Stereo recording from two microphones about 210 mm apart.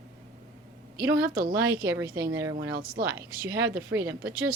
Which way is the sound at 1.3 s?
45° right (ahead or behind).